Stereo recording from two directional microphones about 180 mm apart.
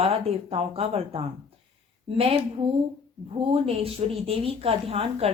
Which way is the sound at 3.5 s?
30° right (ahead or behind).